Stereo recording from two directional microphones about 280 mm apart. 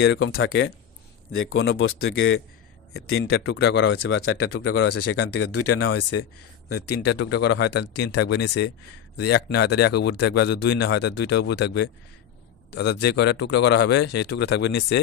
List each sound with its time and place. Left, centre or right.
0.0 s speech: left
7.0 s speech: left
13.0 s speech: left